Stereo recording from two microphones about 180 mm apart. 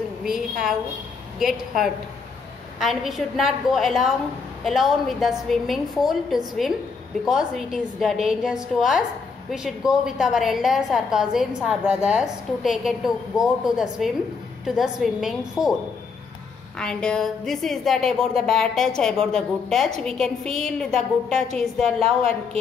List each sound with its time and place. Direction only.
0.2 s a woman's voice: centre (ahead or behind)
16.7 s a woman's voice: 5° left (ahead or behind)
21.8 s a woman's voice: 35° right (ahead or behind)